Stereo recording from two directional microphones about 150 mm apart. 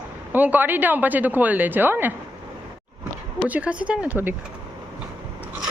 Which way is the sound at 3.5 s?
10° right (ahead or behind).